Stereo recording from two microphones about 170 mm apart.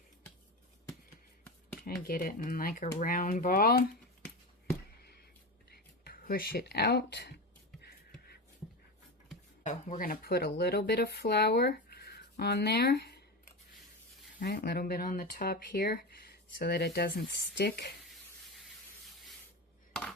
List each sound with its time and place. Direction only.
1.8 s speech: 55° left (ahead or behind)
5.7 s speech: 60° left (ahead or behind); by 7.3 s 85° left
7.8 s a sound: 65° left (ahead or behind)
9.6 s speech: 50° left (ahead or behind); by 13.1 s 70° left (ahead or behind)
14.3 s speech: 65° left (ahead or behind)